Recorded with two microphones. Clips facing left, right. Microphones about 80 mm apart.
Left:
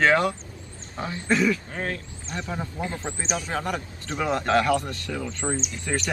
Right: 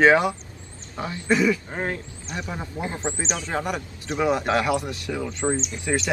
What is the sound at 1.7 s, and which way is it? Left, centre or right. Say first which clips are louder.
A man's voice: right 2 dB; right.